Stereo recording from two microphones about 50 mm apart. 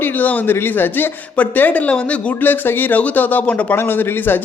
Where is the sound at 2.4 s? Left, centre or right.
Left.